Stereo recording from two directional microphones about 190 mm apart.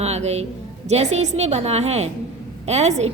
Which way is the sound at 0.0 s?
35° right (ahead or behind).